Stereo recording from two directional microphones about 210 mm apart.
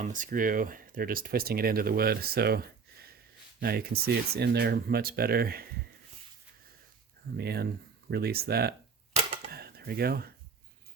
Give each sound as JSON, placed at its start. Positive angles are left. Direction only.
{"t": 0.0, "sound": "speech", "side_deg": -40}
{"t": 7.3, "sound": "speech", "side_deg": -50}
{"t": 9.5, "sound": "a sound", "side_deg": -50}